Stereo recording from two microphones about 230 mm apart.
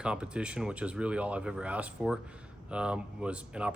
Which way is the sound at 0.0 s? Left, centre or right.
Centre.